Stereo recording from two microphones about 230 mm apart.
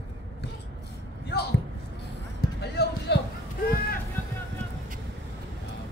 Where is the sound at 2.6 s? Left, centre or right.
Left.